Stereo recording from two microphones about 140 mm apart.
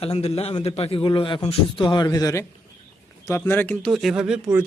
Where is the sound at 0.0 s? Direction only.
45° left (ahead or behind); by 3.9 s 10° left (ahead or behind).